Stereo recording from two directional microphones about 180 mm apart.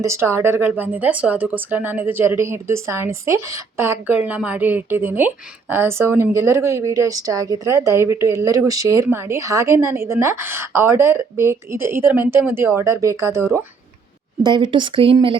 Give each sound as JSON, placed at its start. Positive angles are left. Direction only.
{"t": 0.0, "sound": "speech", "side_deg": -15}